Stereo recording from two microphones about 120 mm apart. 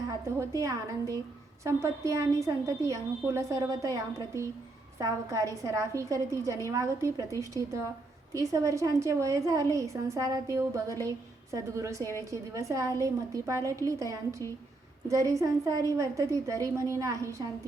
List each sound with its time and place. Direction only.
0.6 s a woman's voice: 30° right (ahead or behind)